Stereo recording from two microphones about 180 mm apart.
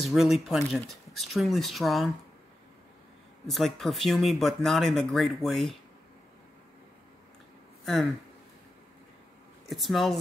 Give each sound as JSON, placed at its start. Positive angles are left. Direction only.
{"t": 0.0, "sound": "speech", "side_deg": 0}
{"t": 3.4, "sound": "speech", "side_deg": 0}
{"t": 7.8, "sound": "speech", "side_deg": 0}
{"t": 9.7, "sound": "speech", "side_deg": 0}